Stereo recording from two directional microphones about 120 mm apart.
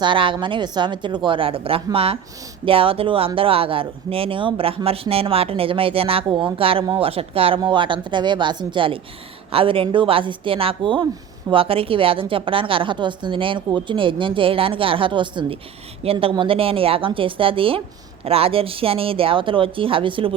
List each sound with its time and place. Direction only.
0.0 s speech: 45° right (ahead or behind)